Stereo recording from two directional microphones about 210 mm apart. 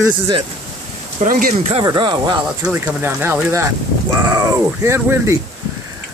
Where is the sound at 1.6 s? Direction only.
25° right (ahead or behind).